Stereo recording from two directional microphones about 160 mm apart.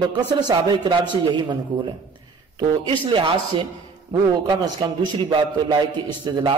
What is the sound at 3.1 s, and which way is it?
A man's voice, 30° right (ahead or behind).